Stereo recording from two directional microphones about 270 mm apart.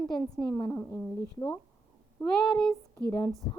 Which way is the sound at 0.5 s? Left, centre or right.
Centre.